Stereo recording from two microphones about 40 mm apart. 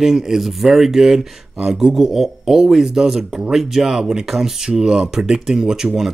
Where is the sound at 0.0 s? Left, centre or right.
Centre.